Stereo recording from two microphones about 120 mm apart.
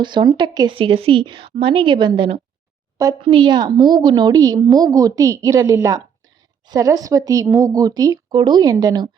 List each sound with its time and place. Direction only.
0.0 s a woman's voice: 40° right (ahead or behind)
0.8 s a woman's voice: 50° right (ahead or behind); by 9.0 s 30° right (ahead or behind)